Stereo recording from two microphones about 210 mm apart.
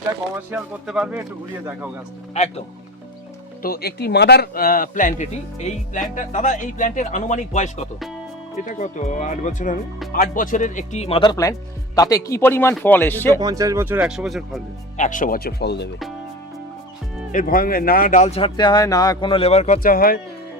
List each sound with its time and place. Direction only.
0.5 s speech: 5° right (ahead or behind)
3.6 s a man's voice: 45° left (ahead or behind); by 13.4 s 10° left (ahead or behind)
13.4 s speech: 15° right (ahead or behind); by 14.6 s centre (ahead or behind)
14.9 s speech: 35° left (ahead or behind); by 15.9 s 55° left (ahead or behind)
17.3 s a man's voice: 40° left (ahead or behind)